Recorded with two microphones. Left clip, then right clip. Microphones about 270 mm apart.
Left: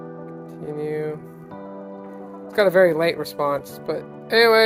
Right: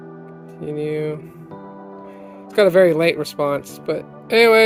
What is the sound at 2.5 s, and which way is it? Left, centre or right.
Speech, right.